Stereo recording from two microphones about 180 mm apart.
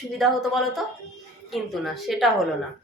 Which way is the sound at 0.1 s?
Centre (ahead or behind).